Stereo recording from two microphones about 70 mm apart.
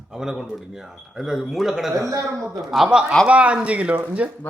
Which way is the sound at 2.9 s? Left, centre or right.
Centre.